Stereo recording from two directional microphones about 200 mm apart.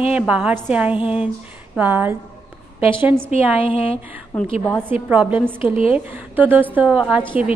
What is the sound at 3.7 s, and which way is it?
Speech, 30° left (ahead or behind).